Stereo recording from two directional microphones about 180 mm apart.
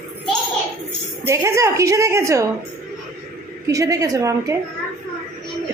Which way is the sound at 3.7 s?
20° right (ahead or behind).